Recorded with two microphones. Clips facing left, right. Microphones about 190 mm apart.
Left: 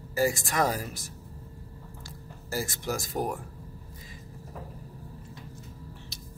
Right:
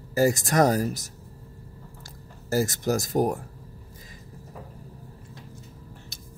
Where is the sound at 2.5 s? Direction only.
45° right (ahead or behind).